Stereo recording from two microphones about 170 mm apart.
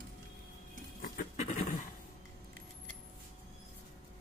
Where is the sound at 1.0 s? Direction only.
50° left (ahead or behind).